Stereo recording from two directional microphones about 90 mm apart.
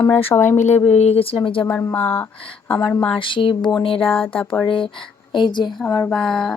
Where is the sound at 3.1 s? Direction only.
70° left (ahead or behind).